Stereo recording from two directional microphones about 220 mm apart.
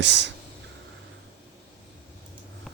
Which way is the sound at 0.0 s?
55° right (ahead or behind).